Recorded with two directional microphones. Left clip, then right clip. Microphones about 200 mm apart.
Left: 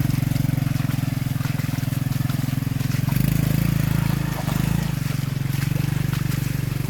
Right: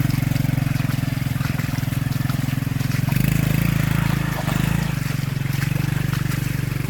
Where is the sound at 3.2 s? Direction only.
15° left (ahead or behind).